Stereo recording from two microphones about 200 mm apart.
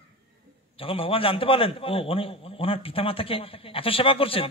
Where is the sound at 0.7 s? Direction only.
25° left (ahead or behind).